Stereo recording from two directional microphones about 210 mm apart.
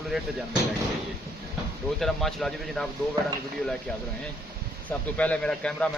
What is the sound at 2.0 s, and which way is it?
Speech, centre (ahead or behind).